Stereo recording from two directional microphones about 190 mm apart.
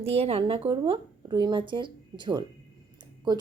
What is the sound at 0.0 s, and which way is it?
A woman's voice, 30° right (ahead or behind).